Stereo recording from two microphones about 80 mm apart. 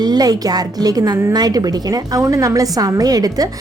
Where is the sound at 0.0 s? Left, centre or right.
Right.